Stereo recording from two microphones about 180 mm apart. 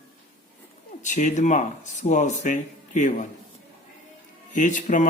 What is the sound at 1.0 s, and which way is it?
Speech, 45° left (ahead or behind).